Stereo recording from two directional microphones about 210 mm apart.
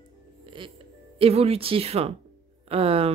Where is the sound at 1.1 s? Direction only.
30° right (ahead or behind).